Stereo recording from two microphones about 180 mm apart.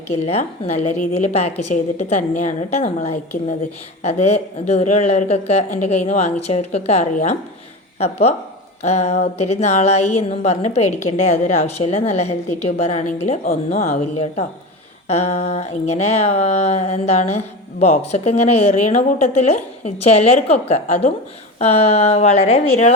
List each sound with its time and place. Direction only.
0.3 s speech: 35° left (ahead or behind)